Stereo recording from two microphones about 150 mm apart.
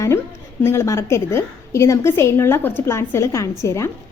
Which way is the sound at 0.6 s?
15° left (ahead or behind).